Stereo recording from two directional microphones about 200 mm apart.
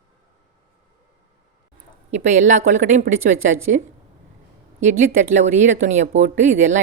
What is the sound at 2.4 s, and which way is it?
Speech, 40° right (ahead or behind).